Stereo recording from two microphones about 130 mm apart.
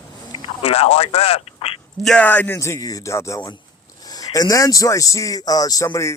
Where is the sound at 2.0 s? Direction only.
10° left (ahead or behind).